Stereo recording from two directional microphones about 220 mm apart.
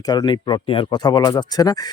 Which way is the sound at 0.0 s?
20° left (ahead or behind).